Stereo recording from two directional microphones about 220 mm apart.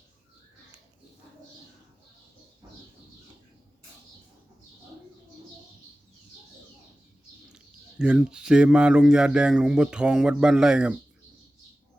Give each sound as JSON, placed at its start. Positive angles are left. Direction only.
{"t": 7.5, "sound": "speech", "side_deg": -5}